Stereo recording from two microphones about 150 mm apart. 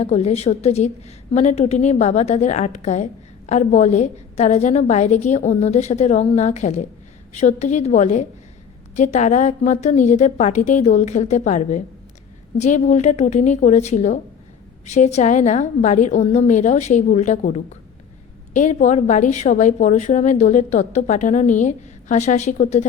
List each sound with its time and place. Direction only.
0.0 s a woman's voice: 45° left (ahead or behind)